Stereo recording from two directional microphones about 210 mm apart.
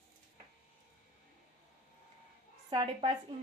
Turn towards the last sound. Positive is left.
turn(degrees=-25)  # may be behind; listen again after turning